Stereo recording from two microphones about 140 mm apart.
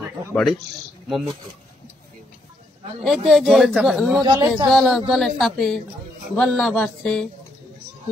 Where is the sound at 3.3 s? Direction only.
Centre (ahead or behind).